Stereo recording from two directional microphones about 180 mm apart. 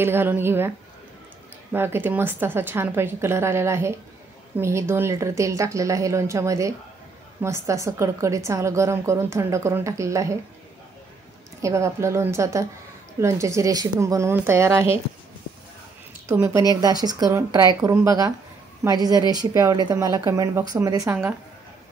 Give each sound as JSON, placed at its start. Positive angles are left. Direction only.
{"t": 0.0, "sound": "a woman's voice", "side_deg": -10}
{"t": 11.6, "sound": "a woman's voice", "side_deg": -15}
{"t": 16.3, "sound": "a woman's voice", "side_deg": -15}